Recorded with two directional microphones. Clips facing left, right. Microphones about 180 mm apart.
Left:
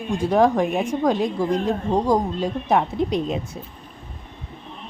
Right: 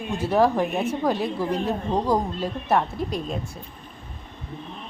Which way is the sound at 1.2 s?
15° left (ahead or behind).